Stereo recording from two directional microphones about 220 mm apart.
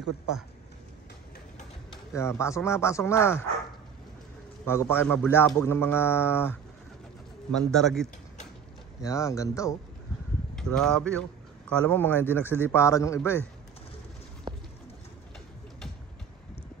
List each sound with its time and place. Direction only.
2.1 s a man's voice: 10° left (ahead or behind)
4.6 s a man's voice: 10° left (ahead or behind)
9.0 s a man's voice: 15° left (ahead or behind)
10.5 s a man's voice: 5° left (ahead or behind)
14.5 s bird: 20° right (ahead or behind)